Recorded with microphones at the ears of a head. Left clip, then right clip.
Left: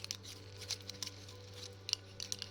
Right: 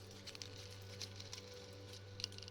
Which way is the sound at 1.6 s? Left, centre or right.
Left.